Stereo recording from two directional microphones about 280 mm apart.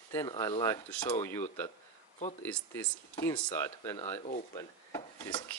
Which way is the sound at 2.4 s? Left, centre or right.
Centre.